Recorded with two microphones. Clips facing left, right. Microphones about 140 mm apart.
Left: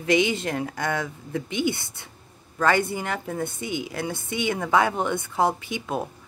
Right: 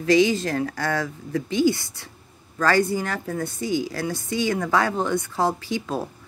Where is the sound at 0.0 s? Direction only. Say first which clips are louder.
Right 4 dB; 20° left (ahead or behind).